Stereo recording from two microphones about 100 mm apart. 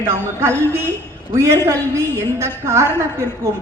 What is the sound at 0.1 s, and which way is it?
A woman's voice, 25° right (ahead or behind).